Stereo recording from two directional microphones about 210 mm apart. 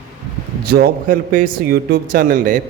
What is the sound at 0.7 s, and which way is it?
A man's voice, 45° right (ahead or behind).